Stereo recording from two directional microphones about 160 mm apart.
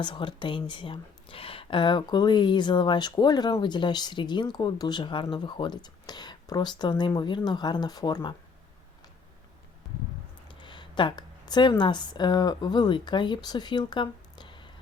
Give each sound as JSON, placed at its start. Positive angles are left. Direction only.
{"t": 0.0, "sound": "speech", "side_deg": 30}
{"t": 10.5, "sound": "speech", "side_deg": 30}